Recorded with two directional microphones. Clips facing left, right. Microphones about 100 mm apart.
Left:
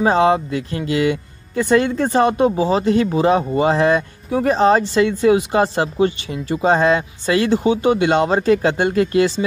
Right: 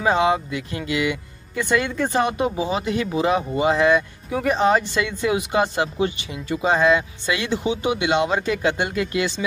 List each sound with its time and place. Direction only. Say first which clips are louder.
0.0 s speech: left 4 dB; 35° left (ahead or behind)